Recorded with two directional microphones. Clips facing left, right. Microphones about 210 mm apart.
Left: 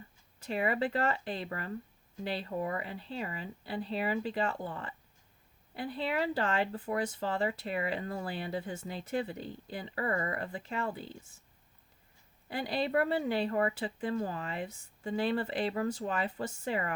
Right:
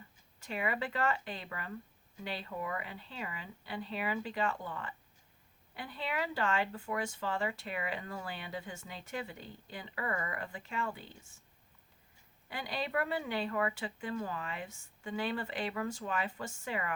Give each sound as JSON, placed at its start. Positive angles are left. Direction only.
{"t": 0.3, "sound": "speech", "side_deg": 35}
{"t": 12.5, "sound": "speech", "side_deg": 35}